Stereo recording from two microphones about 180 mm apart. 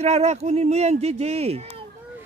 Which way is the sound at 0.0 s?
35° right (ahead or behind).